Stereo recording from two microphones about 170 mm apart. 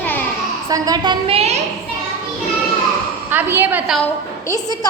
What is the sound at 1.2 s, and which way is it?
Speech, 35° right (ahead or behind).